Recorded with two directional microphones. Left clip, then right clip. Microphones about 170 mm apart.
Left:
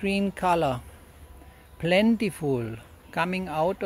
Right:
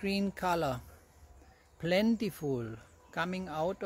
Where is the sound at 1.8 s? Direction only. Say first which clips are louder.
Left 8 dB; 10° left (ahead or behind).